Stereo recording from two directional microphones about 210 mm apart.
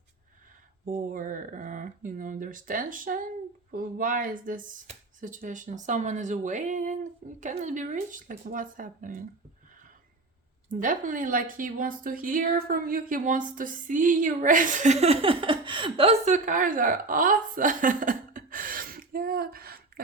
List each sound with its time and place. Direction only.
0.9 s speech: 40° right (ahead or behind)
10.7 s speech: 40° right (ahead or behind)